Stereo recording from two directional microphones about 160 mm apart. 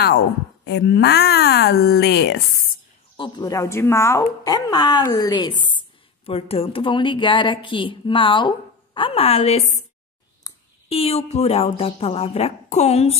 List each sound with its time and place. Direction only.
0.7 s speech: 90° left
3.2 s speech: 25° left (ahead or behind); by 9.8 s 45° left (ahead or behind)
10.4 s a sound: 20° left (ahead or behind)
10.9 s speech: 40° left (ahead or behind)